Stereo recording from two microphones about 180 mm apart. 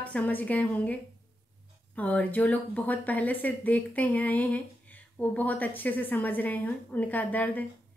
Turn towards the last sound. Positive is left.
turn(degrees=10)  # may be behind; listen again after turning